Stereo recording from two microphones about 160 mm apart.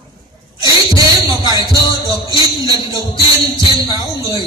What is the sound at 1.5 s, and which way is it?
Speech, 25° right (ahead or behind).